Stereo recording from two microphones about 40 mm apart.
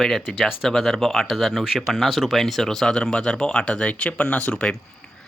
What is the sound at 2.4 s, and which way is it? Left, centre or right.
Speech, centre.